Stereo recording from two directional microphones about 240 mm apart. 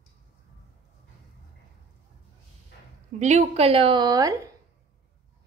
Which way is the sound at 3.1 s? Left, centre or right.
Right.